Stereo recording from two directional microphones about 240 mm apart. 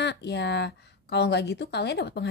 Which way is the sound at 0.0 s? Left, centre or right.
Left.